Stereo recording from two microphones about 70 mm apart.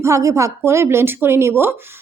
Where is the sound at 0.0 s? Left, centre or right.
Right.